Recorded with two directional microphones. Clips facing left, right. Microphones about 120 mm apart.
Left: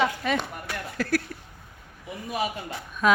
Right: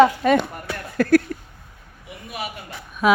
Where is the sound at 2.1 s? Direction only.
30° left (ahead or behind).